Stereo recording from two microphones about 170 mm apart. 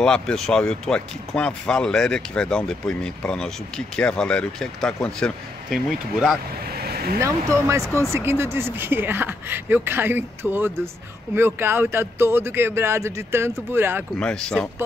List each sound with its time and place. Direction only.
0.0 s speech: 5° left (ahead or behind)
6.8 s vehicle: 65° right (ahead or behind)
7.2 s speech: 15° right (ahead or behind)
14.2 s speech: 5° left (ahead or behind)